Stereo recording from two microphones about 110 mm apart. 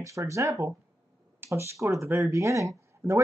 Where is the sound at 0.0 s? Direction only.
30° right (ahead or behind).